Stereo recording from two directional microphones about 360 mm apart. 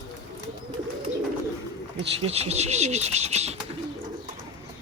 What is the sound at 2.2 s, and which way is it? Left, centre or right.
Speech, centre.